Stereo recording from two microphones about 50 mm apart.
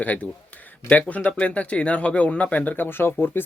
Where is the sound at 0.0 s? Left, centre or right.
Left.